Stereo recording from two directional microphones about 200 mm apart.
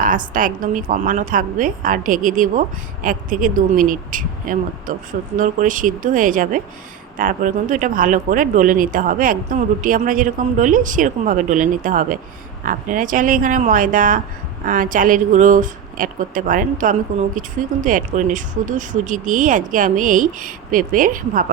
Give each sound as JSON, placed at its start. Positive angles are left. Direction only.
{"t": 0.0, "sound": "speech", "side_deg": -45}